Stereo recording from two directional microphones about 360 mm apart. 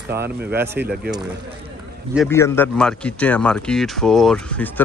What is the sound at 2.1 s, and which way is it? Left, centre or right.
Speech, centre.